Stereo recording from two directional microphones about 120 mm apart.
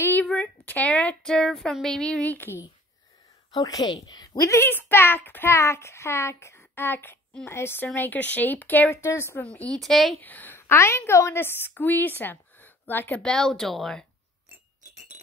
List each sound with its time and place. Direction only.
0.0 s speech: 15° left (ahead or behind)
3.5 s a woman's voice: 30° left (ahead or behind)
9.4 s speech: 10° left (ahead or behind)
10.2 s a woman's voice: 15° left (ahead or behind)